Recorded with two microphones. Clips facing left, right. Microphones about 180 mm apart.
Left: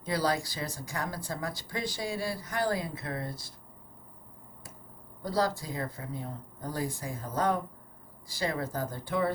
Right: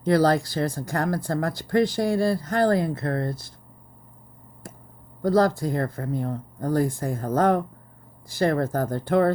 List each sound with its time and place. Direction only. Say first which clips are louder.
0.0 s speech: right 10 dB; 55° right (ahead or behind)
5.2 s speech: right 10 dB; 55° right (ahead or behind)